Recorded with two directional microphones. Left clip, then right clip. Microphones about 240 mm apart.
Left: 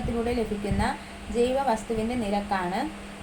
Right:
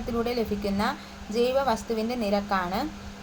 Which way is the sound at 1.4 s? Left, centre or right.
Right.